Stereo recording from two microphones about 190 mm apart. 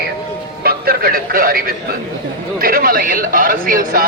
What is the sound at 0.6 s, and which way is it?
Speech, 55° right (ahead or behind).